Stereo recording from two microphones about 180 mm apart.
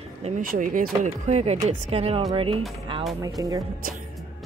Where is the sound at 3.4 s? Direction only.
20° right (ahead or behind).